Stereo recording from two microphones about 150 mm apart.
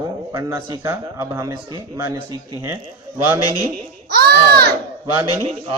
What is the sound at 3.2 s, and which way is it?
Speech, 15° right (ahead or behind).